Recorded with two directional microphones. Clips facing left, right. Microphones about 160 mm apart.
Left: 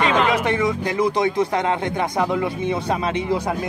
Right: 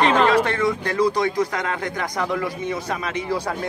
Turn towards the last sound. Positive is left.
turn(degrees=25)  # may be behind; listen again after turning